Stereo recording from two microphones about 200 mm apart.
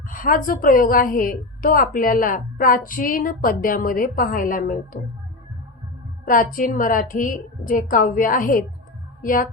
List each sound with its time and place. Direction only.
0.1 s a woman's voice: 45° left (ahead or behind)
6.2 s a woman's voice: 40° left (ahead or behind)